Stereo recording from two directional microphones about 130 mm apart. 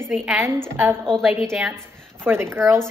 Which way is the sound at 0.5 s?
20° right (ahead or behind).